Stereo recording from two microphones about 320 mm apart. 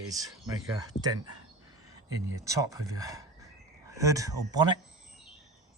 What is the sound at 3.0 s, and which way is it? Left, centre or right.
Speech, centre.